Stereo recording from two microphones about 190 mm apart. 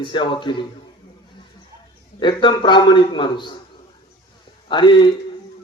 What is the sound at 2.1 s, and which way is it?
Speech, 25° left (ahead or behind).